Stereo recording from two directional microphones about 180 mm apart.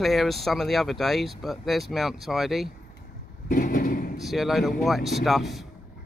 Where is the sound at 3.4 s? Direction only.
50° left (ahead or behind).